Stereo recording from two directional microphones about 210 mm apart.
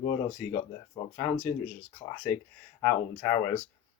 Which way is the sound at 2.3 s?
10° left (ahead or behind).